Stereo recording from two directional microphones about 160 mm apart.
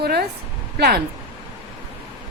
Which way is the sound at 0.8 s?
70° right (ahead or behind).